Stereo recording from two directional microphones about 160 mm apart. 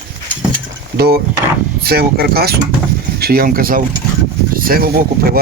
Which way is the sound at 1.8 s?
75° right (ahead or behind).